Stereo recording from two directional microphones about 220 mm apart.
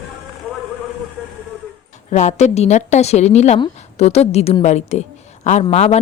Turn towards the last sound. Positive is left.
turn(degrees=30)  # may be behind; listen again after turning